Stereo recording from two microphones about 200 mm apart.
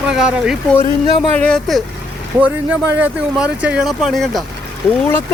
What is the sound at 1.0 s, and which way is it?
Speech, 25° left (ahead or behind).